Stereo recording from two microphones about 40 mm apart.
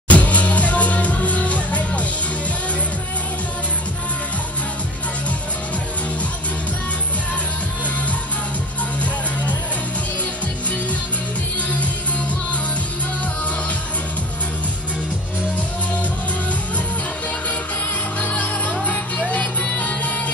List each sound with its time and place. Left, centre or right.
0.1 s music: left
18.2 s music: left